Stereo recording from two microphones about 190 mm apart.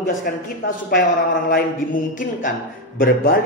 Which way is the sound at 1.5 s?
45° left (ahead or behind).